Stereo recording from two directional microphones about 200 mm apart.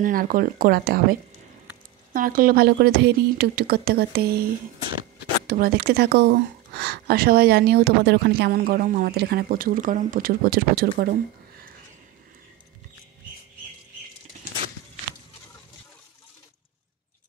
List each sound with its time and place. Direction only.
0.0 s speech: 45° right (ahead or behind)
2.1 s speech: 45° right (ahead or behind)
5.5 s speech: 50° right (ahead or behind)